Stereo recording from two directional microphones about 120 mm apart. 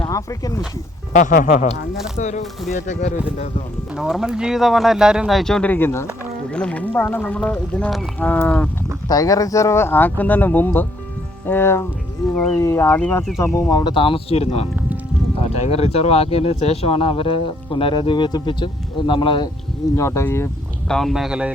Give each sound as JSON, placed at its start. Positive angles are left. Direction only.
{"t": 0.1, "sound": "speech", "side_deg": 25}
{"t": 1.1, "sound": "speech", "side_deg": 90}
{"t": 2.1, "sound": "speech", "side_deg": 80}
{"t": 2.7, "sound": "speech", "side_deg": 90}
{"t": 3.2, "sound": "speech", "side_deg": 65}
{"t": 3.9, "sound": "speech", "side_deg": -5}
{"t": 6.5, "sound": "speech", "side_deg": 10}
{"t": 9.0, "sound": "speech", "side_deg": 30}
{"t": 13.4, "sound": "speech", "side_deg": 25}
{"t": 20.0, "sound": "speech", "side_deg": 20}
{"t": 20.8, "sound": "speech", "side_deg": 5}